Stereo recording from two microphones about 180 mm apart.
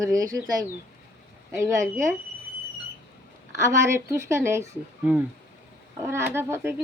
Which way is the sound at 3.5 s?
15° right (ahead or behind).